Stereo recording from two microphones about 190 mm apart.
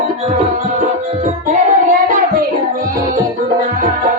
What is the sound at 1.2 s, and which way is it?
Music, 40° right (ahead or behind).